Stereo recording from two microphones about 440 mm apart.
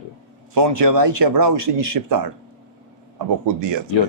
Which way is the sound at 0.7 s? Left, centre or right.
Right.